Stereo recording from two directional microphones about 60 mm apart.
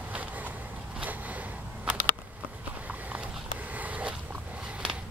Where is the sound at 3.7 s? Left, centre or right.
Right.